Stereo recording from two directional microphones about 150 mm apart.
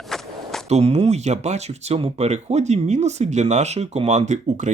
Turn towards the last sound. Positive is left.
turn(degrees=-50)  # may be behind; listen again after turning